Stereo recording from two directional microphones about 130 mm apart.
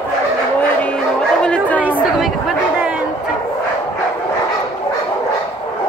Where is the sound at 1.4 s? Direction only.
10° left (ahead or behind).